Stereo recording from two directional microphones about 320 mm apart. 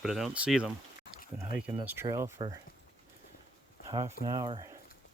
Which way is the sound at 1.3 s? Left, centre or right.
Centre.